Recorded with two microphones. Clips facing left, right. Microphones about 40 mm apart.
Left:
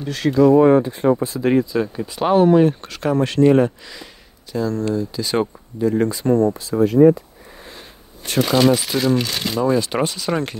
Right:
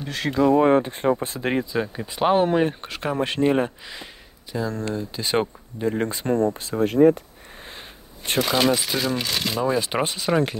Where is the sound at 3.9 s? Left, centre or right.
Centre.